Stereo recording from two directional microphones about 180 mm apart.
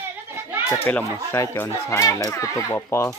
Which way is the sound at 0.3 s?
10° right (ahead or behind).